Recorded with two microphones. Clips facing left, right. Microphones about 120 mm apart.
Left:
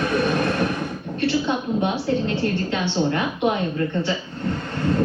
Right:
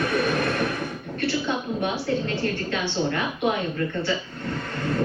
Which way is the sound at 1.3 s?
20° left (ahead or behind).